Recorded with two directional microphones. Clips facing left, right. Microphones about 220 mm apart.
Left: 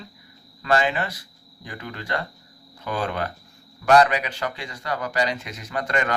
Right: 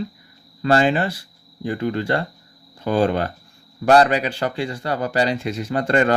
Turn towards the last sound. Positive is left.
turn(degrees=-30)  # may be behind; listen again after turning